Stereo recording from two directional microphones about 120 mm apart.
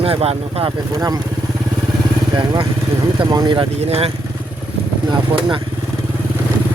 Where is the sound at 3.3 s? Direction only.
35° right (ahead or behind).